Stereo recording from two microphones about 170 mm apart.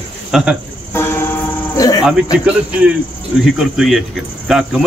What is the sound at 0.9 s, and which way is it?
Music, 15° left (ahead or behind).